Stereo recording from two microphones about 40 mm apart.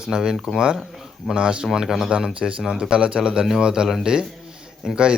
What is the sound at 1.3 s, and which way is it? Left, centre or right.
Speech, right.